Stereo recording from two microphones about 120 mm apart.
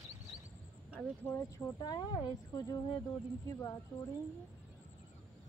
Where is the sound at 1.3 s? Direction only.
20° left (ahead or behind).